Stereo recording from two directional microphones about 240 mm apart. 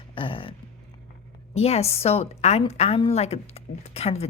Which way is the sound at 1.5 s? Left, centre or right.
Left.